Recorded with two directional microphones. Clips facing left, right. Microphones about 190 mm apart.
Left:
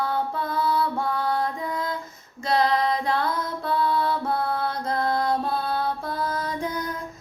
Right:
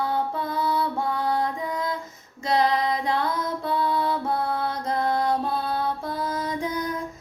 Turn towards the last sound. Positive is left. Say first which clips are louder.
# right 1 dB
turn(degrees=-20)  # may be behind; listen again after turning